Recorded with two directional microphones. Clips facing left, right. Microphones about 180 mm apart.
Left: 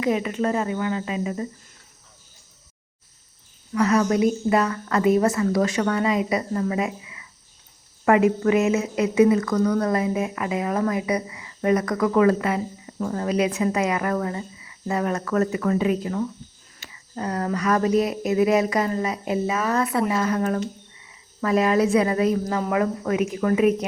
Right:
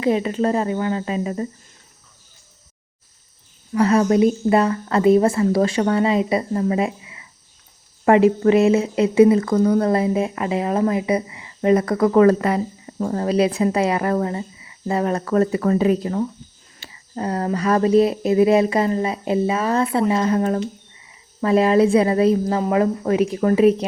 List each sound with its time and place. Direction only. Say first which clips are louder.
0.0 s speech: right 4 dB; 30° right (ahead or behind)
3.8 s speech: right 4 dB; 30° right (ahead or behind)